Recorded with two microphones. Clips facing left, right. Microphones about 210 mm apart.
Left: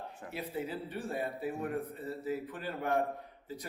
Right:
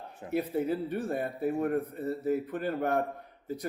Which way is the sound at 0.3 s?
50° right (ahead or behind).